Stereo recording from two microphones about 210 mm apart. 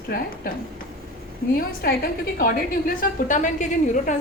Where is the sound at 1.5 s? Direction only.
45° left (ahead or behind).